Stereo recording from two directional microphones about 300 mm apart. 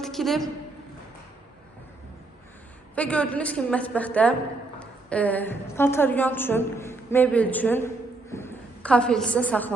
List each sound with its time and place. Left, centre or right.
0.0 s a woman's voice: centre
2.9 s a woman's voice: centre